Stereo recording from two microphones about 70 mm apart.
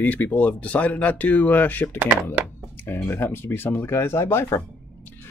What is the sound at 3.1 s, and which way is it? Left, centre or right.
Speech, left.